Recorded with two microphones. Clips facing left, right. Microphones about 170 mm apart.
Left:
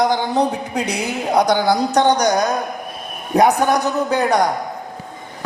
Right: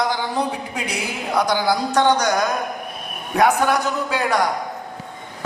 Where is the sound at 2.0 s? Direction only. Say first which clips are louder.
Left 1 dB; 15° left (ahead or behind).